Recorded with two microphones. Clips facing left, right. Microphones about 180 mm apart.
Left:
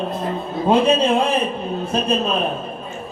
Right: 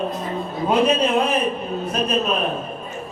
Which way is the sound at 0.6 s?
30° left (ahead or behind).